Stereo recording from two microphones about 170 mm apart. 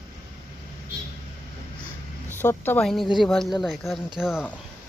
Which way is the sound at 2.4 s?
10° left (ahead or behind).